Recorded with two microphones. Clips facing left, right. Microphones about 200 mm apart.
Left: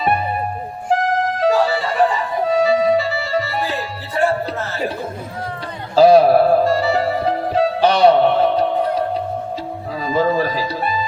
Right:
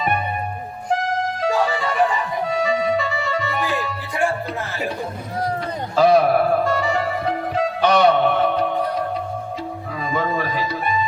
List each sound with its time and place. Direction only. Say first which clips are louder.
1.4 s music: left 4 dB; 35° left (ahead or behind)
6.0 s music: left 5 dB; 30° left (ahead or behind)
10.1 s music: left 6 dB; 30° left (ahead or behind)